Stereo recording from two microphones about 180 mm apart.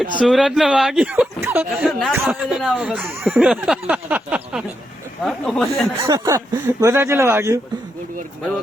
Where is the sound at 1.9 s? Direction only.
Centre (ahead or behind).